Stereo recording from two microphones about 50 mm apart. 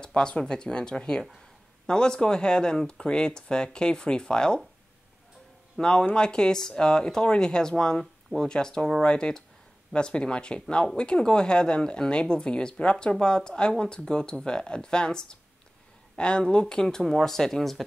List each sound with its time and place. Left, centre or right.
0.0 s speech: centre
5.8 s speech: centre